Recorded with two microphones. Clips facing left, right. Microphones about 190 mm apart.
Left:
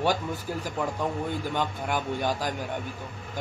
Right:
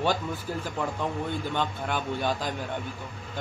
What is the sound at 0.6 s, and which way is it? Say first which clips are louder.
Speech: left 2 dB; 10° left (ahead or behind).